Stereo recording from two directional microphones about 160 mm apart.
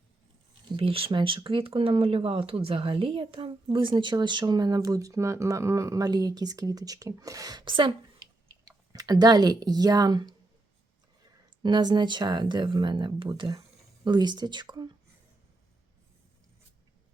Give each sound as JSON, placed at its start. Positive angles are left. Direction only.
{"t": 0.8, "sound": "speech", "side_deg": -35}
{"t": 11.6, "sound": "speech", "side_deg": -25}